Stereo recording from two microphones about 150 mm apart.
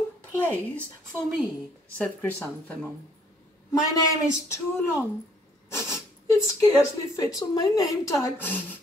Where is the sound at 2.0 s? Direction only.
10° left (ahead or behind).